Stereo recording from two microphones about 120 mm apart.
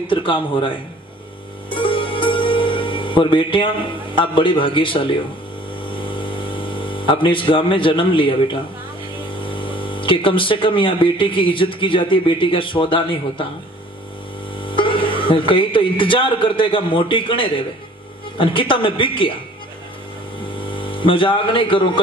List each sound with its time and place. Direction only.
0.1 s speech: 45° left (ahead or behind)
1.7 s music: 45° left (ahead or behind)
4.2 s speech: 45° left (ahead or behind)
5.9 s mains hum: 45° left (ahead or behind)
9.4 s speech: 45° left (ahead or behind)
14.7 s speech: 45° left (ahead or behind)
20.6 s speech: 45° left (ahead or behind)